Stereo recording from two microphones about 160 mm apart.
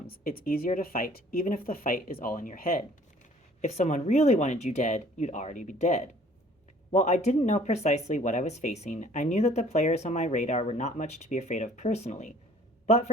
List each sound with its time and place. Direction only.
0.1 s speech: 65° left (ahead or behind)
3.6 s speech: 45° left (ahead or behind)
12.8 s a sound: 45° left (ahead or behind)